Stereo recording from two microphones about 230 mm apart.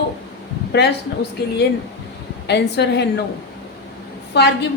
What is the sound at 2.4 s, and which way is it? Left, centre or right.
Speech, left.